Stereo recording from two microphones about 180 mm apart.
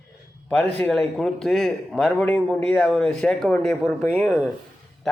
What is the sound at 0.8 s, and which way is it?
Speech, centre (ahead or behind).